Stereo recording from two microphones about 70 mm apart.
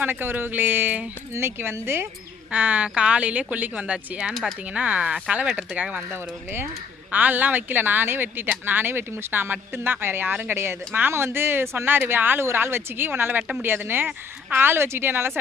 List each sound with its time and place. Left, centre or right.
0.0 s speech: right
1.3 s speech: right
2.5 s speech: centre
7.1 s speech: right